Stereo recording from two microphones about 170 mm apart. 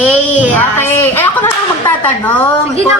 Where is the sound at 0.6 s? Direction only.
10° left (ahead or behind).